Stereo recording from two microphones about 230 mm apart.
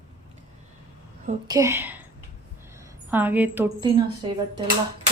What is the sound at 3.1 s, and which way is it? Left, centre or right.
Speech, centre.